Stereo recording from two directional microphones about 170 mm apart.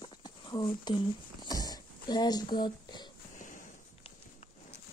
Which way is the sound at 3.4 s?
50° left (ahead or behind).